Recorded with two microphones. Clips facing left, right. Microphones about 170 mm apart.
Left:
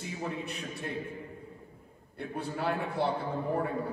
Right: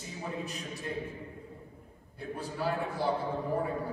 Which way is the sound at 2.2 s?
60° left (ahead or behind).